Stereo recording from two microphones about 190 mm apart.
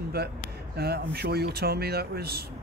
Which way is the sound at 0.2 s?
60° right (ahead or behind).